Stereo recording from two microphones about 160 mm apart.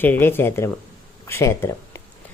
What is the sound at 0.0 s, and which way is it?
A man's voice, 15° left (ahead or behind).